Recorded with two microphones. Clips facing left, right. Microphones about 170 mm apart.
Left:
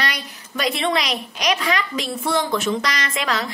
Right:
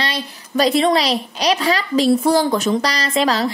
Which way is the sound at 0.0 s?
30° right (ahead or behind).